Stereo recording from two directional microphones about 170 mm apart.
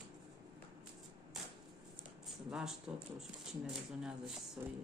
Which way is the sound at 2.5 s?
5° right (ahead or behind).